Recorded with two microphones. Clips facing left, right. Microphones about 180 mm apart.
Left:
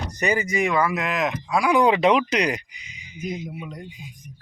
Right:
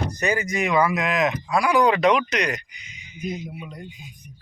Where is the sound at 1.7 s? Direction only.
25° left (ahead or behind).